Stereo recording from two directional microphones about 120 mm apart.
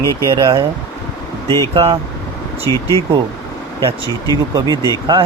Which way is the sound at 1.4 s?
25° left (ahead or behind).